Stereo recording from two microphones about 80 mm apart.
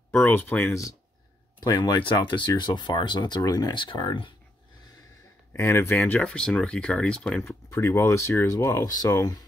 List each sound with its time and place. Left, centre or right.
0.2 s speech: left
1.6 s speech: left
3.4 s speech: left
3.7 s speech: left
5.5 s speech: left
6.2 s speech: centre
7.8 s speech: left